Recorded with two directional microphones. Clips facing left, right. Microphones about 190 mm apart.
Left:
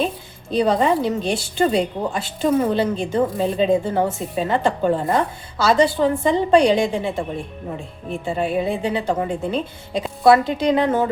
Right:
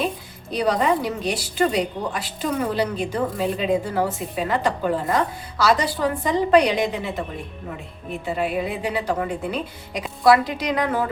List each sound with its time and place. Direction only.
0.5 s a woman's voice: 25° left (ahead or behind)